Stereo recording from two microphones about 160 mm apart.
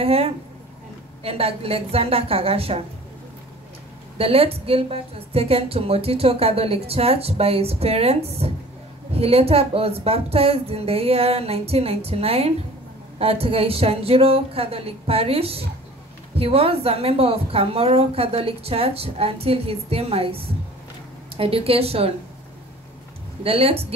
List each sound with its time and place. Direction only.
0.0 s a woman's voice: 35° right (ahead or behind)
4.2 s a woman's voice: 40° right (ahead or behind)
23.4 s a woman's voice: 35° right (ahead or behind)